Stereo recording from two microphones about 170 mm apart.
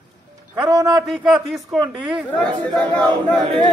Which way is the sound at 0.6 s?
25° right (ahead or behind).